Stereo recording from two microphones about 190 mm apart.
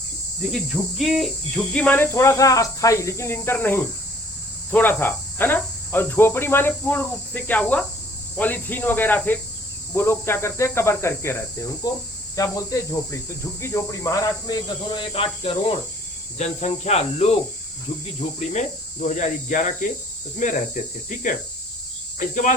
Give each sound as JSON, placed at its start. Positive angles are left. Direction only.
{"t": 0.5, "sound": "speech", "side_deg": 0}
{"t": 18.3, "sound": "speech", "side_deg": 40}
{"t": 20.8, "sound": "speech", "side_deg": 45}
{"t": 22.2, "sound": "speech", "side_deg": 45}